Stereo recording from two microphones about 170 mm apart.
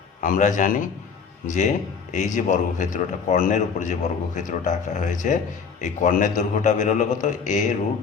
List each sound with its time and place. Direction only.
0.2 s a man's voice: 50° left (ahead or behind)